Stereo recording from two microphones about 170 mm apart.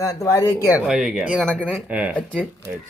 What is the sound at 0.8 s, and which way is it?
Speech, centre (ahead or behind).